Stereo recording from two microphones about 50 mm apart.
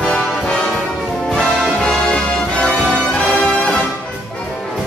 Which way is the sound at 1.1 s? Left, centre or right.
Centre.